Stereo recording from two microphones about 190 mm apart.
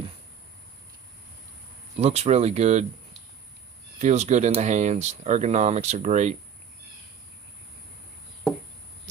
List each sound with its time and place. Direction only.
2.0 s speech: 35° right (ahead or behind)
4.0 s speech: 35° right (ahead or behind)